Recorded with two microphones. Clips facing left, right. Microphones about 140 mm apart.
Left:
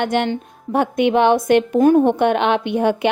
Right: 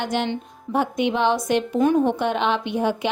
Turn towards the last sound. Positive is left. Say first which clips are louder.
# left 5 dB
turn(degrees=60)  # may be behind; listen again after turning